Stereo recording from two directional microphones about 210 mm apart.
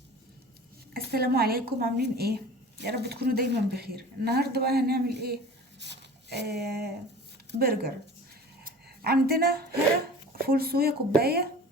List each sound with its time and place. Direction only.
0.9 s a woman's voice: 50° right (ahead or behind)
8.6 s a sound: 45° right (ahead or behind)
10.4 s a woman's voice: 45° right (ahead or behind)